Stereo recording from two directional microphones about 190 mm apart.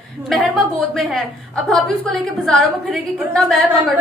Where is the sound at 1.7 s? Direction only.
Centre (ahead or behind).